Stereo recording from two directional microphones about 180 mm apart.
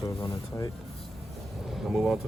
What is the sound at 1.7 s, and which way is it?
Speech, centre (ahead or behind).